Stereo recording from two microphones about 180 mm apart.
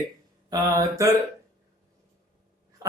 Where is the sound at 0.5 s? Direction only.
20° right (ahead or behind).